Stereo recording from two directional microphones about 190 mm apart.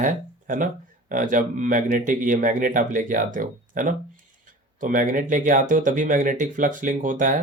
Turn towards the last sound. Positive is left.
turn(degrees=-45)  # may be behind; listen again after turning